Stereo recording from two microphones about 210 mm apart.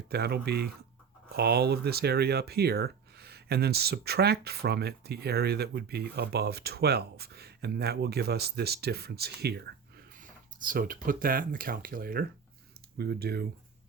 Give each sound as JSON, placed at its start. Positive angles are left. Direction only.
{"t": 0.1, "sound": "speech", "side_deg": -50}